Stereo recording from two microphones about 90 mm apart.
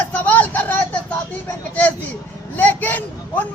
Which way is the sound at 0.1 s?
20° left (ahead or behind).